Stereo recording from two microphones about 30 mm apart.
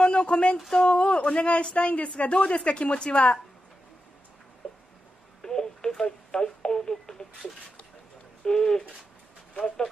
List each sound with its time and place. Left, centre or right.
0.0 s speech: left
5.4 s telephone: left
5.9 s speech: centre
6.3 s telephone: left
8.5 s speech: left
9.5 s speech: left